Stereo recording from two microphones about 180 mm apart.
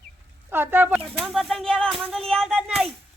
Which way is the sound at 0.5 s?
10° right (ahead or behind).